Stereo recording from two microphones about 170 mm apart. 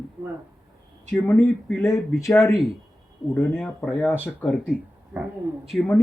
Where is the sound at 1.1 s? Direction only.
10° left (ahead or behind).